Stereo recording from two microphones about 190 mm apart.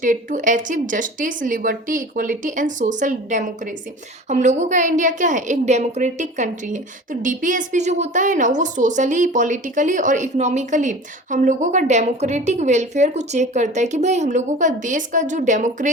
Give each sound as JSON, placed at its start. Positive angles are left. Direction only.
{"t": 0.0, "sound": "a woman's voice", "side_deg": -45}